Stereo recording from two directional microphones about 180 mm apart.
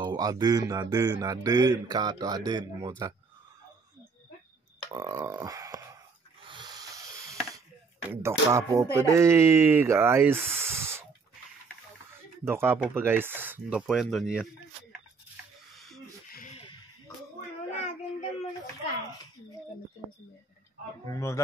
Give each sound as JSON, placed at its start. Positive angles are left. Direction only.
{"t": 0.0, "sound": "speech", "side_deg": -25}
{"t": 4.9, "sound": "speech", "side_deg": -20}
{"t": 6.4, "sound": "snoring", "side_deg": -25}
{"t": 8.1, "sound": "speech", "side_deg": -15}
{"t": 12.4, "sound": "speech", "side_deg": -10}
{"t": 15.7, "sound": "a sound", "side_deg": 0}
{"t": 16.3, "sound": "a sound", "side_deg": 50}
{"t": 21.1, "sound": "a man's voice", "side_deg": 15}